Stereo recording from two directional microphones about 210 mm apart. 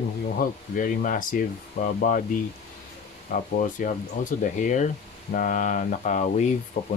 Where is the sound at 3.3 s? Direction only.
40° left (ahead or behind).